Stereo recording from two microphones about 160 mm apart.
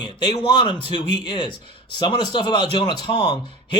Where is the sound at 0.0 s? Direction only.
30° left (ahead or behind).